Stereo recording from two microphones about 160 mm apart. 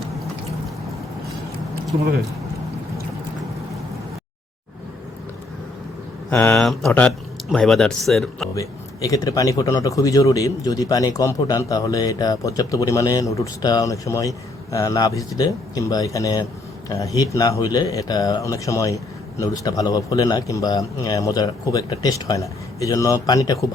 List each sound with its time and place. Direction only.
6.3 s speech: 10° left (ahead or behind)
8.5 s speech: 20° left (ahead or behind)